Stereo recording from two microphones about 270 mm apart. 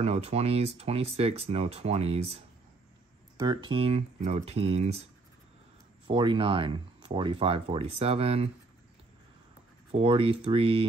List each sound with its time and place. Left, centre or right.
0.0 s speech: right
6.0 s speech: centre
9.9 s speech: right